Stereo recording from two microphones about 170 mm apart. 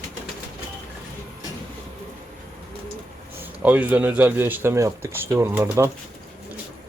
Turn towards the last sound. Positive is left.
turn(degrees=-15)  # may be behind; listen again after turning